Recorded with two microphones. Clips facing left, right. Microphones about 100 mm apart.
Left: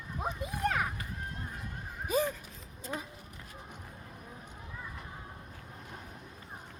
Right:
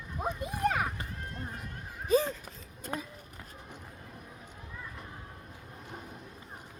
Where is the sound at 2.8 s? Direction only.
55° right (ahead or behind).